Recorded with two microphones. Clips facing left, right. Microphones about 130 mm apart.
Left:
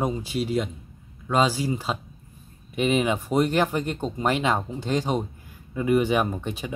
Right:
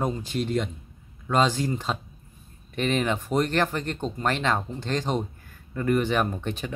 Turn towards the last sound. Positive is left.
turn(degrees=10)  # may be behind; listen again after turning